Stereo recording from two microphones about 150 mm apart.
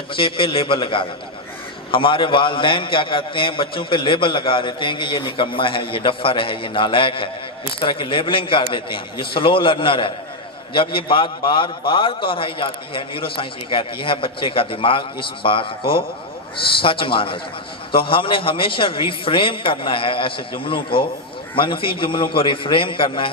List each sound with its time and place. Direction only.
0.1 s a man's voice: 35° left (ahead or behind)
16.8 s a man's voice: 35° left (ahead or behind)